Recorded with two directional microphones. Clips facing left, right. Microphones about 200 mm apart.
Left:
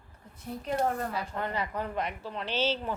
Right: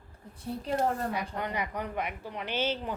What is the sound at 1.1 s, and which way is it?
A woman's voice, 15° right (ahead or behind).